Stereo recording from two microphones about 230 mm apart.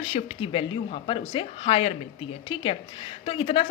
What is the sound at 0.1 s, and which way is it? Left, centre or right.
Speech, left.